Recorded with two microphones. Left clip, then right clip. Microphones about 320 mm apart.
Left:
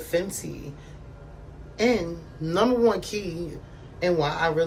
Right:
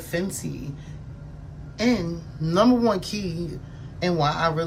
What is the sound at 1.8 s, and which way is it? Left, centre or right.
Speech, centre.